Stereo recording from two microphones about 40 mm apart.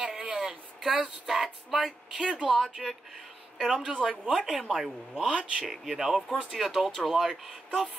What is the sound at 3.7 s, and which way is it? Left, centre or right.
Speech, right.